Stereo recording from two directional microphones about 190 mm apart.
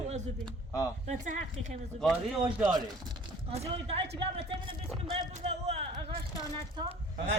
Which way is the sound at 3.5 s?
30° right (ahead or behind).